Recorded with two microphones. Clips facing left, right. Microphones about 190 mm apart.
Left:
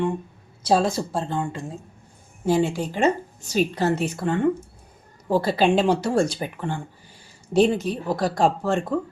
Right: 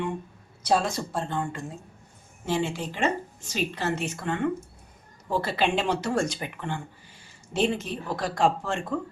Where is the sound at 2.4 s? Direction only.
40° left (ahead or behind).